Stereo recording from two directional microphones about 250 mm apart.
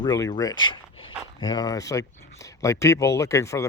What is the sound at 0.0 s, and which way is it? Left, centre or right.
Speech, centre.